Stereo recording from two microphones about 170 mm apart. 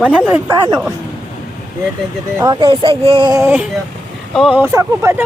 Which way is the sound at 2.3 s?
25° right (ahead or behind).